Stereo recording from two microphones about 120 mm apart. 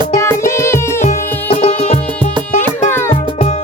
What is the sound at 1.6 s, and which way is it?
Music, 65° left (ahead or behind).